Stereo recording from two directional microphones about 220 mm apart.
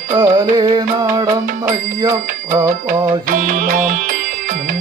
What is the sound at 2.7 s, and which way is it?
Music, 35° right (ahead or behind).